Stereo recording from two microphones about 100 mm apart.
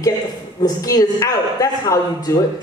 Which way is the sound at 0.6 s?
35° left (ahead or behind).